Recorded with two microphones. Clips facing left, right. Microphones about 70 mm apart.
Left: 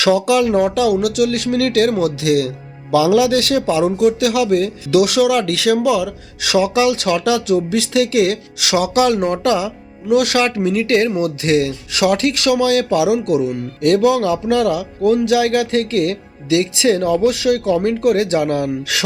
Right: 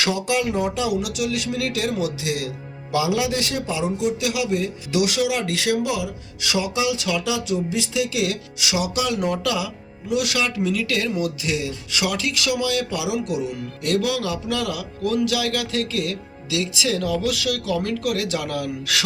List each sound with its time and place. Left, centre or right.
0.3 s speech: left
3.2 s speech: left
9.1 s speech: left
11.2 s speech: left
12.5 s speech: left